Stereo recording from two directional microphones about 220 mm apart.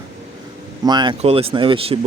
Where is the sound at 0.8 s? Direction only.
20° right (ahead or behind).